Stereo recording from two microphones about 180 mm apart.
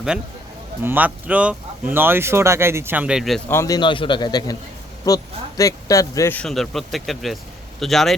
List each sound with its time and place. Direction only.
0.8 s speech: 10° right (ahead or behind)
3.5 s a man's voice: 15° left (ahead or behind); by 8.1 s centre (ahead or behind)